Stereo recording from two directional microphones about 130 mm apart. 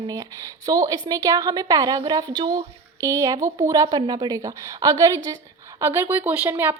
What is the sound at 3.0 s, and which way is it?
A woman's voice, 25° right (ahead or behind).